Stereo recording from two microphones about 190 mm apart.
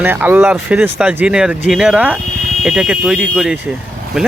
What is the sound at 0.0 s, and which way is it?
Speech, 10° right (ahead or behind).